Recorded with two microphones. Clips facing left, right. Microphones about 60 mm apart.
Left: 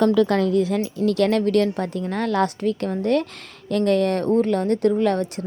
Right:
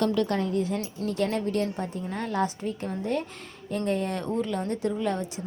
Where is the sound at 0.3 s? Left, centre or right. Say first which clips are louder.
Left 7 dB; left.